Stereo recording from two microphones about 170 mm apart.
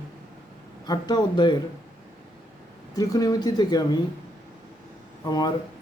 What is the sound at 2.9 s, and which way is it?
Speech, 20° left (ahead or behind).